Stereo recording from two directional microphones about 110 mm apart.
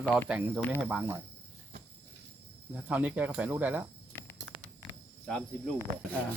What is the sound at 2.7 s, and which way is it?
Speech, 15° right (ahead or behind).